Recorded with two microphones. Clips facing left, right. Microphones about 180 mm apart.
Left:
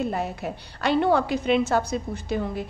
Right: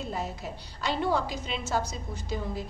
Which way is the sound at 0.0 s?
60° left (ahead or behind).